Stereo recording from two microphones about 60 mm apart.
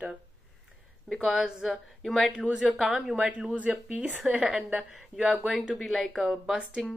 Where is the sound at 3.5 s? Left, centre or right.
Right.